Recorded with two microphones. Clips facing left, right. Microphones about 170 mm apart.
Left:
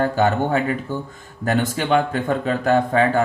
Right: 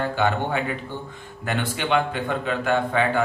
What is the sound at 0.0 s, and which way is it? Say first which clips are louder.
A man's voice: left 5 dB; 40° left (ahead or behind).